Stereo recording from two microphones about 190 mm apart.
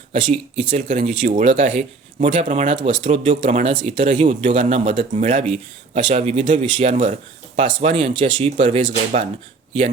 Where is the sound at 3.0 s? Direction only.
30° right (ahead or behind).